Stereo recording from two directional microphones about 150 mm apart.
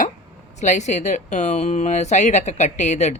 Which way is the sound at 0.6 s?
50° left (ahead or behind).